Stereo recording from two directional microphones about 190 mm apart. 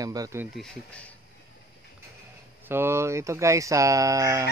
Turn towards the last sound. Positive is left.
turn(degrees=-15)  # may be behind; listen again after turning